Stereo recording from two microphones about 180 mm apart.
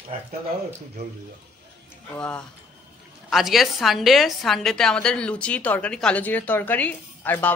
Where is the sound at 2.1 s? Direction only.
5° left (ahead or behind).